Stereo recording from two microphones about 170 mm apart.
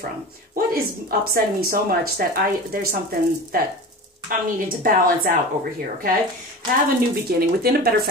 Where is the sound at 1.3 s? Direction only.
60° right (ahead or behind).